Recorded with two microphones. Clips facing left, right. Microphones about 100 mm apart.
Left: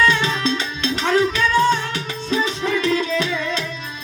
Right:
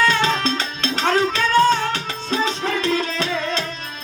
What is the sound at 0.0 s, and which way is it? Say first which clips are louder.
Music: even; 35° right (ahead or behind).